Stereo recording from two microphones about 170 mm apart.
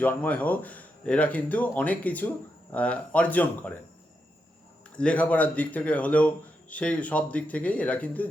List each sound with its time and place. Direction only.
0.0 s speech: 10° left (ahead or behind)
4.9 s speech: 5° left (ahead or behind)